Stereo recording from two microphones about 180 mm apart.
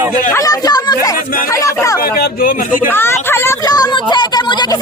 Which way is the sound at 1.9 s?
55° left (ahead or behind).